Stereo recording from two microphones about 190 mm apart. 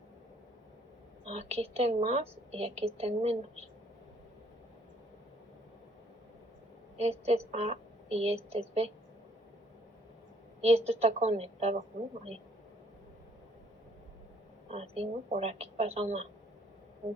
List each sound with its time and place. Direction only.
1.2 s a woman's voice: 35° right (ahead or behind)
6.9 s a woman's voice: 30° right (ahead or behind)
10.6 s a woman's voice: 35° right (ahead or behind)
14.7 s a woman's voice: 35° right (ahead or behind)